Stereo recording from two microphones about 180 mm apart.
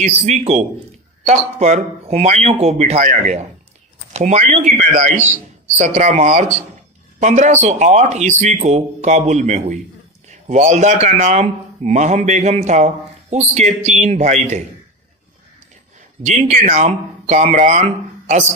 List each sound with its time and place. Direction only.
0.0 s a man's voice: 40° right (ahead or behind)
16.3 s speech: 40° right (ahead or behind)